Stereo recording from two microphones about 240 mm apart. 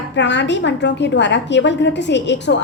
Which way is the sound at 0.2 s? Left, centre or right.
Left.